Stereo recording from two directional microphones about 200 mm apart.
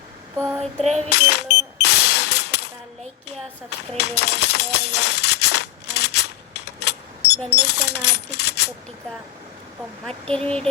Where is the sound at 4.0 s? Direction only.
55° left (ahead or behind).